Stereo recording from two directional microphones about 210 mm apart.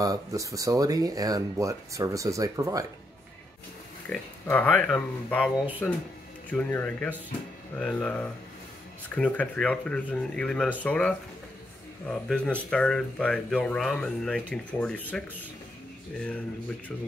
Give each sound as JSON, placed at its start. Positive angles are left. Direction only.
{"t": 0.0, "sound": "speech", "side_deg": -15}
{"t": 4.1, "sound": "speech", "side_deg": 5}